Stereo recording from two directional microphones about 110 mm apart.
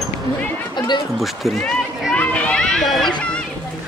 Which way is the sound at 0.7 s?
40° left (ahead or behind).